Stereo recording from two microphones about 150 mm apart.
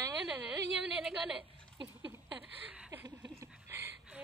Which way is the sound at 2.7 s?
10° right (ahead or behind).